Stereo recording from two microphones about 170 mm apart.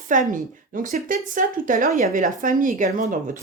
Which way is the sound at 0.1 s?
50° right (ahead or behind).